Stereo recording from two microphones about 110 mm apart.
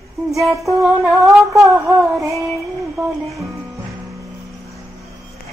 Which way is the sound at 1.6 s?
25° right (ahead or behind).